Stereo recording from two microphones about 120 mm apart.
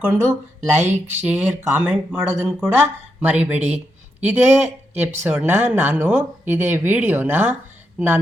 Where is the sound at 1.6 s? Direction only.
15° right (ahead or behind).